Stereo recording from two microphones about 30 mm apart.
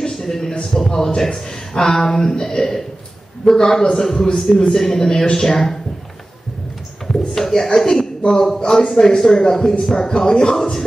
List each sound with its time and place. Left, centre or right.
0.0 s a sound: left
0.8 s speech: centre
7.1 s speech: centre